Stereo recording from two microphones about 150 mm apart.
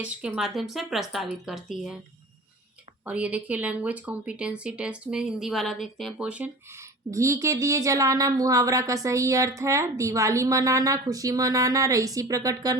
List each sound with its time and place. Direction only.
0.0 s a woman's voice: 5° right (ahead or behind)
3.1 s speech: 10° right (ahead or behind)
7.1 s speech: 20° right (ahead or behind)